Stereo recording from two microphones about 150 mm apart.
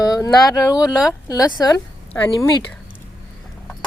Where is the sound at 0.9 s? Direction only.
Centre (ahead or behind).